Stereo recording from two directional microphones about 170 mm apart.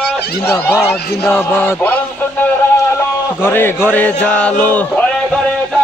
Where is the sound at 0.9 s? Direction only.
10° left (ahead or behind).